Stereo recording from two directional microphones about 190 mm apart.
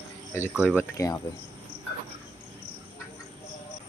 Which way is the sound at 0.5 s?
5° right (ahead or behind).